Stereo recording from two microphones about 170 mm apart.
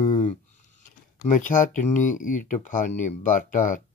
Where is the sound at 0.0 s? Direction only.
45° left (ahead or behind).